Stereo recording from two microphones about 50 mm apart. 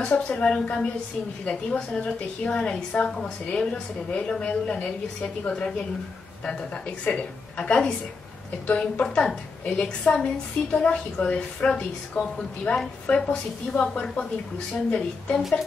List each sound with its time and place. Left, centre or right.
0.0 s a woman's voice: centre
5.5 s a woman's voice: centre
7.1 s a woman's voice: left
14.9 s a woman's voice: left